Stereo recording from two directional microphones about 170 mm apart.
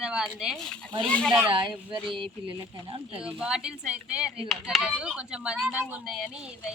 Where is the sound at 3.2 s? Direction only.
5° right (ahead or behind).